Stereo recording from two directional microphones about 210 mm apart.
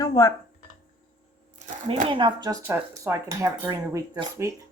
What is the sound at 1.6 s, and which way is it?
Speech, 25° right (ahead or behind).